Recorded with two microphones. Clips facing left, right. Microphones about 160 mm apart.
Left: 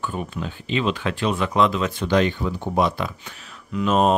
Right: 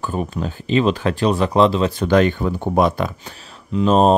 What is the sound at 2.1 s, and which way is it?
Speech, 50° right (ahead or behind).